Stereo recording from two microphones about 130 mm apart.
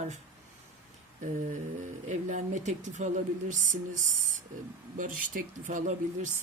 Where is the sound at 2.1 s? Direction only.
65° right (ahead or behind); by 3.8 s 80° right.